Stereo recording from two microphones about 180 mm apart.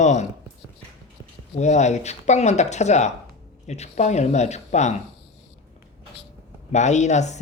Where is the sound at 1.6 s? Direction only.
40° left (ahead or behind).